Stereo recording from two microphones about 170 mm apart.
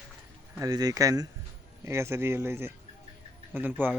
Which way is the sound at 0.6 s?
20° right (ahead or behind).